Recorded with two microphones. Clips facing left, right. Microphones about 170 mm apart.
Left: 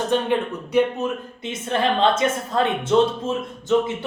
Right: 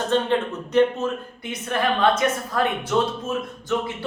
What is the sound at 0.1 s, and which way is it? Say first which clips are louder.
A woman's voice: right 2 dB; 10° left (ahead or behind).